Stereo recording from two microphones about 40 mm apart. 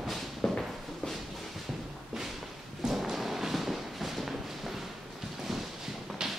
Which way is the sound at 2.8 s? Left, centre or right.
Centre.